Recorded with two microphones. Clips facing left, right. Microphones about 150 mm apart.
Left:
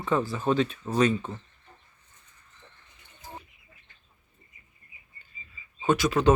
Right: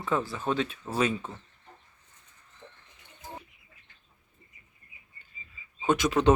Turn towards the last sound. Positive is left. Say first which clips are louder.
# left 1 dB
turn(degrees=-20)  # may be behind; listen again after turning